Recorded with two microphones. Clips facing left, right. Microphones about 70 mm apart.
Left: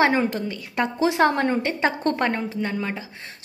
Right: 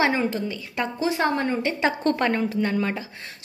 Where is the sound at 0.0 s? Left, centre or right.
Left.